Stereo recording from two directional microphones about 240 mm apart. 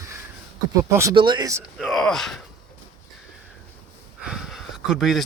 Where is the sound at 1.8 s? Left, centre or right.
Centre.